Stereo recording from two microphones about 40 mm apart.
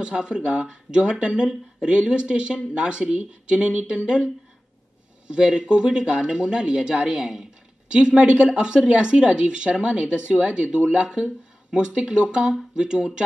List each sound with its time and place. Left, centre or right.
0.0 s speech: right
5.3 s speech: right